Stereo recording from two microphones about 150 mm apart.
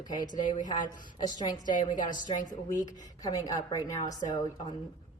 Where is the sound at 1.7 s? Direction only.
55° left (ahead or behind).